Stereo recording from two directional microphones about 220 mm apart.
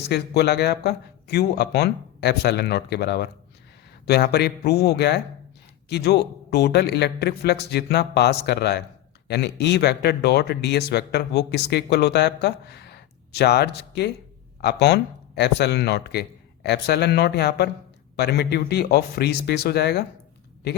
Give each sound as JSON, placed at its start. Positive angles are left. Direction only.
{"t": 0.1, "sound": "speech", "side_deg": 50}